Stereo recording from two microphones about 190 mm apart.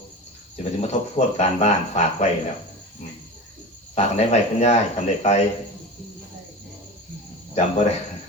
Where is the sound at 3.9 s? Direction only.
35° left (ahead or behind).